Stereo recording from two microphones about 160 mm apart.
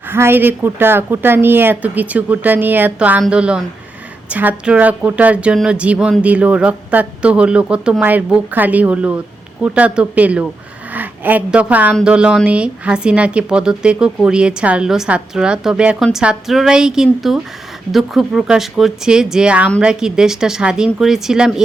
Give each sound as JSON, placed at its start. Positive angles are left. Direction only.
{"t": 0.1, "sound": "a woman's voice", "side_deg": -15}